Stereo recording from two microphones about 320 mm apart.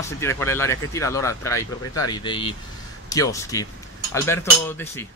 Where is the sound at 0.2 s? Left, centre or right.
Centre.